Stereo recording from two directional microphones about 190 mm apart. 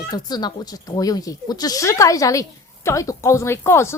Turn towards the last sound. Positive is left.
turn(degrees=15)  # may be behind; listen again after turning